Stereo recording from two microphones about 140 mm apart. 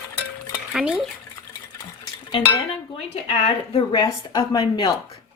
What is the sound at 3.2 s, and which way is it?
Speech, 45° left (ahead or behind).